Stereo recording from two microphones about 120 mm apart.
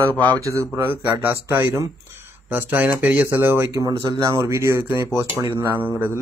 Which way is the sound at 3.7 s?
30° right (ahead or behind).